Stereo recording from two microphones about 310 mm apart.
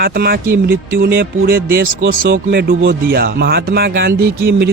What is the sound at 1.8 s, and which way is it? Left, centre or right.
Speech, right.